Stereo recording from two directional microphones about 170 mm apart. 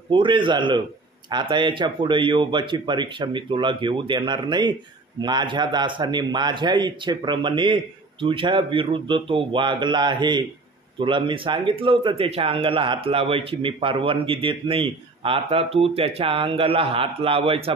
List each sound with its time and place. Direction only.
0.1 s a man's voice: 30° right (ahead or behind)